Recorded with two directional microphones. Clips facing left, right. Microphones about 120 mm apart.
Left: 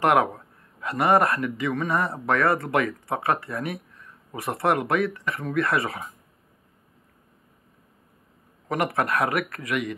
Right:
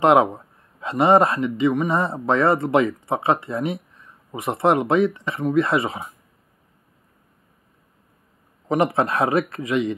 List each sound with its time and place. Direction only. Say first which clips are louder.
0.0 s speech: right 5 dB; 20° right (ahead or behind)
8.6 s speech: right 5 dB; 25° right (ahead or behind)